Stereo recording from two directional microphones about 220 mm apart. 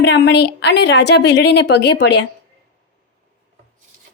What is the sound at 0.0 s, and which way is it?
A woman's voice, 50° left (ahead or behind).